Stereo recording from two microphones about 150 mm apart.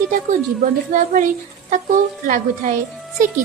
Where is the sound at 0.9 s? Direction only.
60° right (ahead or behind).